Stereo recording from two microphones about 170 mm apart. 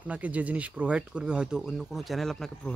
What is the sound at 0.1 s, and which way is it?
Speech, 10° right (ahead or behind).